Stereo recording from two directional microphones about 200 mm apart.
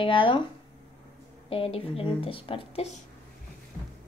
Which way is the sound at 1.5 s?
30° left (ahead or behind).